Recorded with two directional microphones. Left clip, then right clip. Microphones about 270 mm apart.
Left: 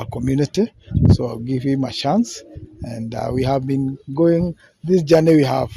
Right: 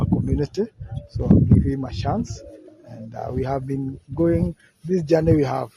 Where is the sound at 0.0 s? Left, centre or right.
Left.